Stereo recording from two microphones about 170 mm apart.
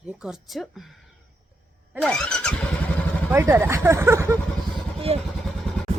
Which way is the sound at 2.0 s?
5° left (ahead or behind).